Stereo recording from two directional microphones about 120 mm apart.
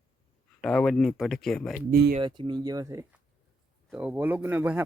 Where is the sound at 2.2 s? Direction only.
40° right (ahead or behind).